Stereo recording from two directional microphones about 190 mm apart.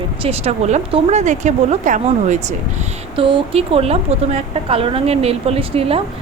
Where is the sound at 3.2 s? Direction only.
30° right (ahead or behind).